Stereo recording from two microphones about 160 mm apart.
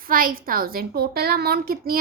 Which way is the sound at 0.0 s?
60° right (ahead or behind).